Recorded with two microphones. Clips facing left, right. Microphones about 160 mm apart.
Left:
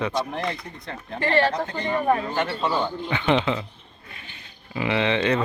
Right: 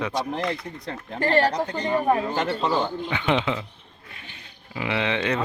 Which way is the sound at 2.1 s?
20° right (ahead or behind).